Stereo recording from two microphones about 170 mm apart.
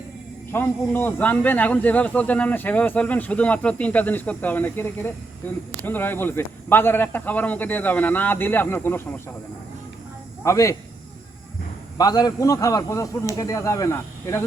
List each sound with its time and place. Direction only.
0.5 s speech: 10° left (ahead or behind)
10.4 s speech: 20° left (ahead or behind)
11.9 s a man's voice: 20° left (ahead or behind)